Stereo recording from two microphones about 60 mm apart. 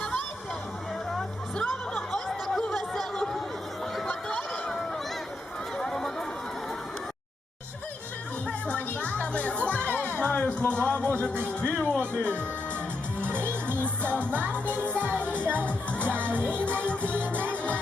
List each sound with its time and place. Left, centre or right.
1.5 s chatter: centre
4.0 s a sound: centre
5.7 s a sound: centre
8.6 s music: left
13.2 s music: right
15.5 s music: left
16.2 s music: right